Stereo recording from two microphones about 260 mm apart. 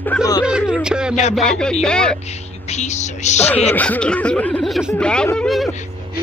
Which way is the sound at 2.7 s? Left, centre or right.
Left.